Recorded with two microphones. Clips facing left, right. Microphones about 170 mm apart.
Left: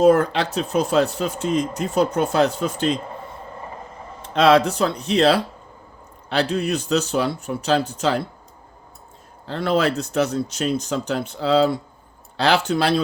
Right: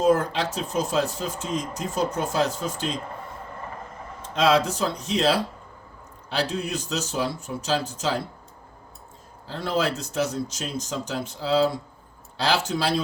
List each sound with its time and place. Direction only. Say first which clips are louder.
0.0 s speech: left 5 dB; 65° left (ahead or behind)
4.2 s speech: left 5 dB; 65° left (ahead or behind)
9.5 s speech: left 5 dB; 65° left (ahead or behind)